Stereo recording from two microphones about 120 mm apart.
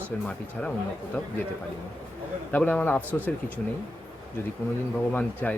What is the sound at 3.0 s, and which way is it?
Speech, 15° right (ahead or behind).